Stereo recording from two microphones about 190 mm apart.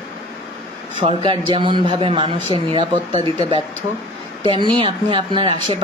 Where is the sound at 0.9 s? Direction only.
25° right (ahead or behind).